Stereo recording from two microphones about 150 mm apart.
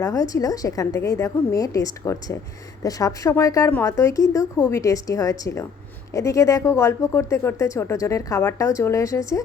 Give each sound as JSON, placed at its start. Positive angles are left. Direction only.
{"t": 0.0, "sound": "speech", "side_deg": 20}